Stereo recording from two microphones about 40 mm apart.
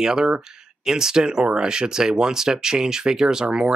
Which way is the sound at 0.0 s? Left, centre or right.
Centre.